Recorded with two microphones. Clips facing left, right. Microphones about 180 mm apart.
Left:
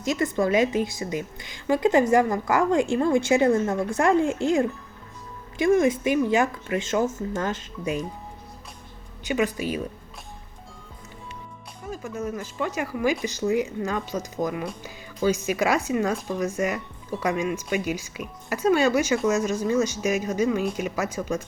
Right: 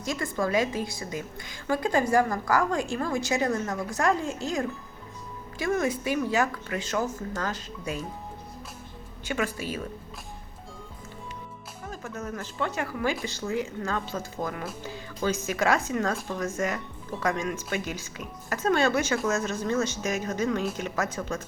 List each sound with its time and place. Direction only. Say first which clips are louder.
0.0 s a woman's voice: left 5 dB; 20° left (ahead or behind)
5.6 s a woman's voice: left 7 dB; 20° left (ahead or behind)
9.2 s speech: left 5 dB; 15° left (ahead or behind)
11.9 s speech: left 5 dB; 10° left (ahead or behind)